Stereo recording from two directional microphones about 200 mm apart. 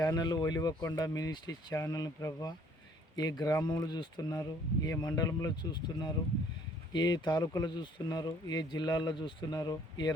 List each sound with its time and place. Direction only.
0.0 s speech: 20° left (ahead or behind)